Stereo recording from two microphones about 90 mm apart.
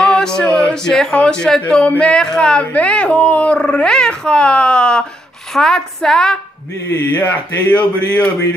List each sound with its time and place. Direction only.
0.0 s a sound: 10° left (ahead or behind)
1.7 s a woman's voice: 10° left (ahead or behind)
6.9 s a man's voice: 20° left (ahead or behind)